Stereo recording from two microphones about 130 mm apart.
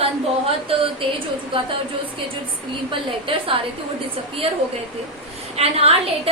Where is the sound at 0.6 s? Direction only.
45° right (ahead or behind).